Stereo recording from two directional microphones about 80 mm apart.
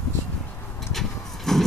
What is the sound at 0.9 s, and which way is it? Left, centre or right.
Vehicle, centre.